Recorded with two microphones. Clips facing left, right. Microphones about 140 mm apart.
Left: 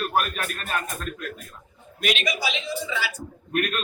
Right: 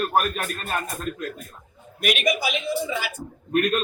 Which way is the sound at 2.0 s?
50° right (ahead or behind).